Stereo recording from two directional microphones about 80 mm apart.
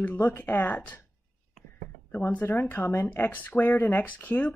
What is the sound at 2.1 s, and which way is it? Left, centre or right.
Speech, left.